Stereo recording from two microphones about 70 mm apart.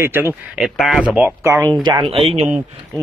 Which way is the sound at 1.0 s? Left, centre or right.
Right.